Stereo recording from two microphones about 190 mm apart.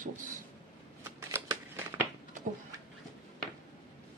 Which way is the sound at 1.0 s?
15° right (ahead or behind).